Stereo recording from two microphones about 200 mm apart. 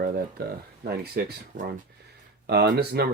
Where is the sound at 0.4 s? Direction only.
50° right (ahead or behind).